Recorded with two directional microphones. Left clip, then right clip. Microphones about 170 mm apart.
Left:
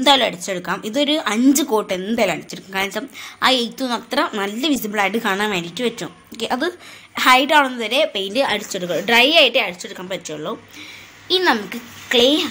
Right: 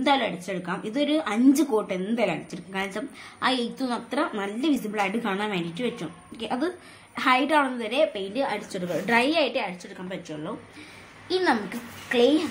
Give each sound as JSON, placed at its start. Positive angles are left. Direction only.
{"t": 0.0, "sound": "speech", "side_deg": 30}
{"t": 8.7, "sound": "a woman's voice", "side_deg": 10}
{"t": 9.9, "sound": "speech", "side_deg": 40}
{"t": 11.2, "sound": "a woman's voice", "side_deg": 15}